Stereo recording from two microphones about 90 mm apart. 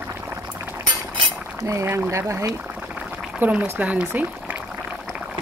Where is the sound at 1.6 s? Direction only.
35° right (ahead or behind).